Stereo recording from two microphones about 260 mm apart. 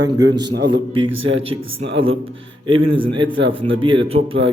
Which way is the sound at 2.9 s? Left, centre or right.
Centre.